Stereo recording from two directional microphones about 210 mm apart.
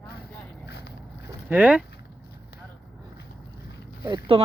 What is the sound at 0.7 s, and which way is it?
Boat, 50° left (ahead or behind).